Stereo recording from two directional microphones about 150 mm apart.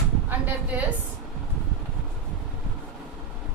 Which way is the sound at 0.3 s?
10° right (ahead or behind).